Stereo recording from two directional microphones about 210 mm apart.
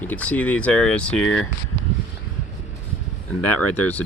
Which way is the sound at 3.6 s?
90° left.